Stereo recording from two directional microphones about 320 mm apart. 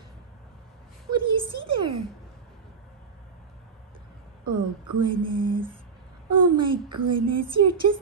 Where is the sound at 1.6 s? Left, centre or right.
Centre.